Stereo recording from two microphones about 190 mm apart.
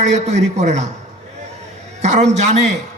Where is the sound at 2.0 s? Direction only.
35° right (ahead or behind).